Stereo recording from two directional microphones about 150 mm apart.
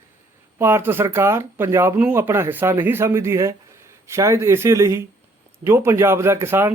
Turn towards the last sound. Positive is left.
turn(degrees=-15)  # may be behind; listen again after turning